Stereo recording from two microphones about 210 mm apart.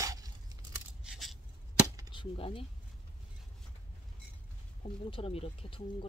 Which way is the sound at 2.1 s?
25° left (ahead or behind).